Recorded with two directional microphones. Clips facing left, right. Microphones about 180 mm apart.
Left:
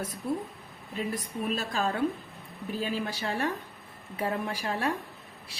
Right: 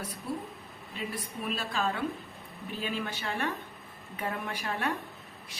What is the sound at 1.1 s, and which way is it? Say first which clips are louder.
A woman's voice: left 3 dB; 40° left (ahead or behind).